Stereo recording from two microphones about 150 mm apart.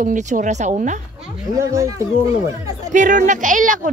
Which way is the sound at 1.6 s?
20° right (ahead or behind).